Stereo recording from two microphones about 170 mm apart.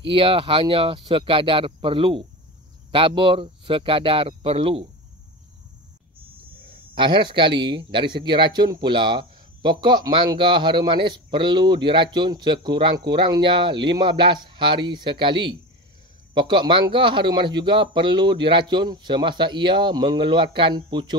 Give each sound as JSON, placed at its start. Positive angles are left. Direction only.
{"t": 0.0, "sound": "speech", "side_deg": -30}
{"t": 6.6, "sound": "a sound", "side_deg": -30}
{"t": 7.6, "sound": "speech", "side_deg": -30}